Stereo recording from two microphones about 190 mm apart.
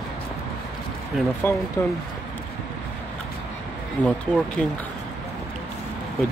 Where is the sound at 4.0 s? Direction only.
10° left (ahead or behind).